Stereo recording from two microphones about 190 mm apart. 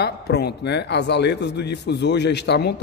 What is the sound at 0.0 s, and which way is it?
A man's voice, 60° left (ahead or behind).